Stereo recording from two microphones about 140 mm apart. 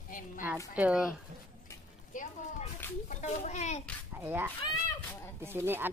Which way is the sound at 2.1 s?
65° left (ahead or behind).